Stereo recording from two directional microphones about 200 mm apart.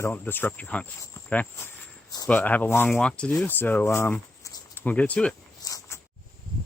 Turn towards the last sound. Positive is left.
turn(degrees=15)  # may be behind; listen again after turning